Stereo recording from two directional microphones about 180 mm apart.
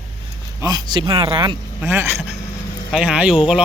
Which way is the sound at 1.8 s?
10° right (ahead or behind).